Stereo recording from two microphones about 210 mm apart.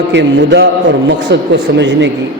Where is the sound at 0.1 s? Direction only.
55° right (ahead or behind).